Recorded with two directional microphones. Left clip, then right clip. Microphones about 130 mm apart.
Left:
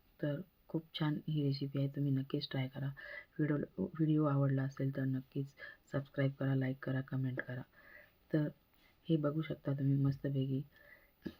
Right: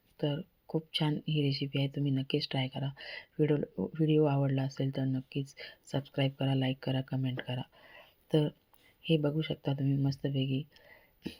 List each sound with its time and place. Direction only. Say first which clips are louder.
0.2 s speech: right 5 dB; 25° right (ahead or behind)